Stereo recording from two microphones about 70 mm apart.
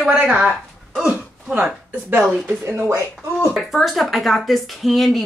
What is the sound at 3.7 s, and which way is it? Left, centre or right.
Speech, centre.